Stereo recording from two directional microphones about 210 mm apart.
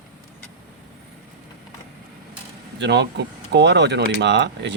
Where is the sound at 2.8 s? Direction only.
55° right (ahead or behind).